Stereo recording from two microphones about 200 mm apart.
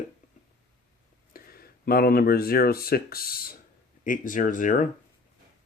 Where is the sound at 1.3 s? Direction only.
50° left (ahead or behind).